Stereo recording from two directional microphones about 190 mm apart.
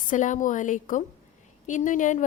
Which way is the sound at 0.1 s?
40° left (ahead or behind).